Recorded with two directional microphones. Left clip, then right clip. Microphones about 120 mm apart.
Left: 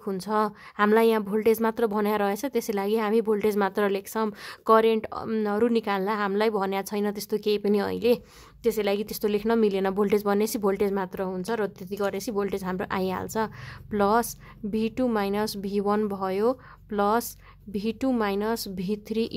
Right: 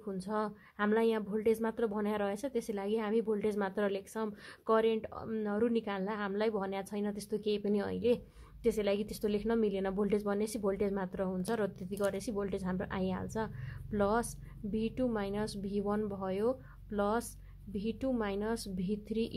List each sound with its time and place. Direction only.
0.0 s speech: 50° left (ahead or behind)